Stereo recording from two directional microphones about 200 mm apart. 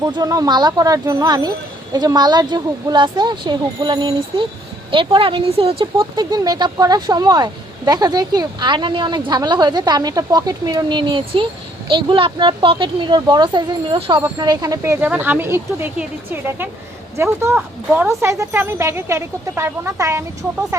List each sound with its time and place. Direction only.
0.0 s speech: 20° right (ahead or behind)